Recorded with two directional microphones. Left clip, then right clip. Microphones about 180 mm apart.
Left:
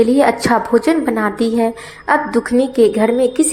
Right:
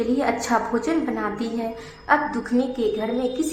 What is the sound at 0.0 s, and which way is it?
A woman's voice, 35° left (ahead or behind).